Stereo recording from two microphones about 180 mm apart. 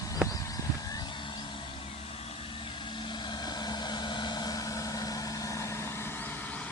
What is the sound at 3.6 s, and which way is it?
Vehicle, 25° left (ahead or behind).